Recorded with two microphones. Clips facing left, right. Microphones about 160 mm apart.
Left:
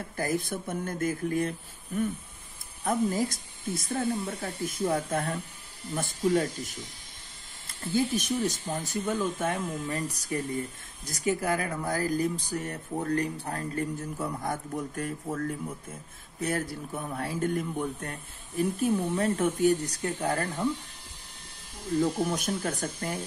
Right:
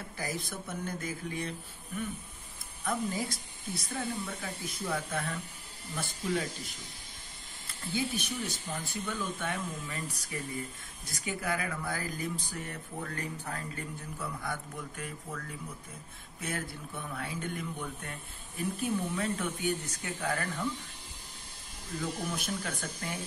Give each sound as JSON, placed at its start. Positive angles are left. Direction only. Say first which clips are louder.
{"t": 0.2, "sound": "speech", "louder": "left 8 dB", "side_deg": 50}
{"t": 2.8, "sound": "speech", "louder": "left 6 dB", "side_deg": 45}
{"t": 7.9, "sound": "speech", "louder": "left 7 dB", "side_deg": 45}
{"t": 22.0, "sound": "speech", "louder": "left 5 dB", "side_deg": 45}